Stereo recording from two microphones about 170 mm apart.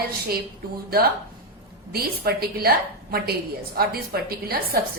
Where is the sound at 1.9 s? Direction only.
65° right (ahead or behind).